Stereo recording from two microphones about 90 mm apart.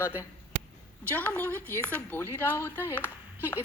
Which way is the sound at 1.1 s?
20° left (ahead or behind).